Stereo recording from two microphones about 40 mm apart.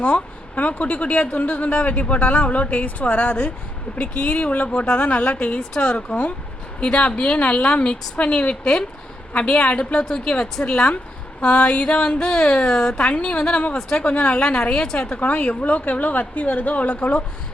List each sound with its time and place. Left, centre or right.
0.5 s a woman's voice: left; by 13.0 s centre
13.0 s a woman's voice: left